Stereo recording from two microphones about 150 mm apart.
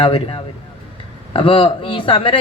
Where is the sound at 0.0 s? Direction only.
40° left (ahead or behind).